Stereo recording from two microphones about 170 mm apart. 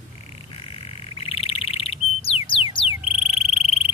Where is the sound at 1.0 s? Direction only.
35° left (ahead or behind).